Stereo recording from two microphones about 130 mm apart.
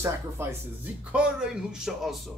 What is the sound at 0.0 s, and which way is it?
Speech, 20° right (ahead or behind).